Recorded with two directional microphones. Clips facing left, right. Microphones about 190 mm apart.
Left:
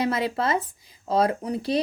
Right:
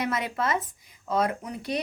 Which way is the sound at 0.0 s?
30° left (ahead or behind).